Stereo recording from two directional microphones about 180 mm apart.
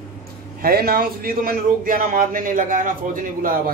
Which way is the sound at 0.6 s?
55° right (ahead or behind).